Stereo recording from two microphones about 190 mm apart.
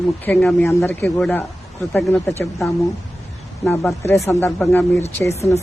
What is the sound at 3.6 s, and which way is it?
Speech, 15° left (ahead or behind).